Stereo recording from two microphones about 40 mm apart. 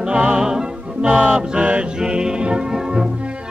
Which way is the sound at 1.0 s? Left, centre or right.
Right.